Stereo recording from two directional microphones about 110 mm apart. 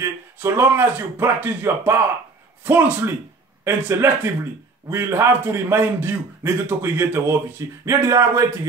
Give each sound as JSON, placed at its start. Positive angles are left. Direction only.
{"t": 0.0, "sound": "a man's voice", "side_deg": -25}